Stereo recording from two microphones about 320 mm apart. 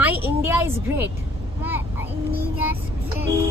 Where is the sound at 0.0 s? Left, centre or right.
Centre.